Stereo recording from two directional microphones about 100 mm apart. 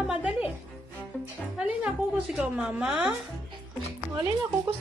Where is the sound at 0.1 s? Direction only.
10° right (ahead or behind).